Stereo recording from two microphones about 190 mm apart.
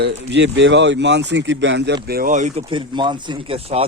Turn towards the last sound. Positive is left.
turn(degrees=-30)  # may be behind; listen again after turning